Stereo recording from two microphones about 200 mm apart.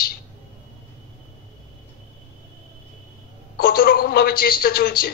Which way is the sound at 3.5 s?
50° left (ahead or behind).